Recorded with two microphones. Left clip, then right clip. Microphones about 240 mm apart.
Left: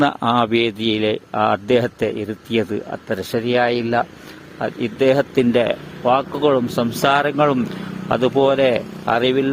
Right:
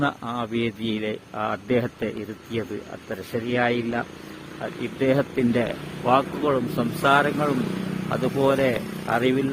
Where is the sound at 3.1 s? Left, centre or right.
Left.